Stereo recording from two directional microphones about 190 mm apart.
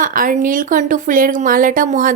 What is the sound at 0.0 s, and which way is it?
A woman's voice, 45° right (ahead or behind).